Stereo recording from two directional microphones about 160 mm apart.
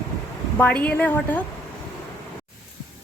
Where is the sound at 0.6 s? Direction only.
10° left (ahead or behind).